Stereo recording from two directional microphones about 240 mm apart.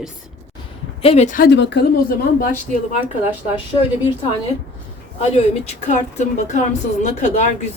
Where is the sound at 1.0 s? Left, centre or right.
Left.